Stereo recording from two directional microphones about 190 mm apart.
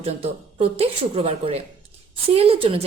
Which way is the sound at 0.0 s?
30° right (ahead or behind).